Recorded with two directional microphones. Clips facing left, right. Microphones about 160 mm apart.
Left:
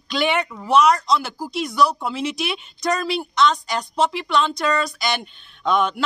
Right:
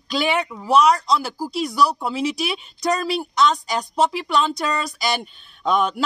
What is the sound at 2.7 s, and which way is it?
Speech, 40° right (ahead or behind).